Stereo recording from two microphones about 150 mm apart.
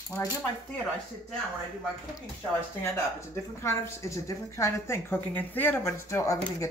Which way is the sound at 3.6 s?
20° left (ahead or behind).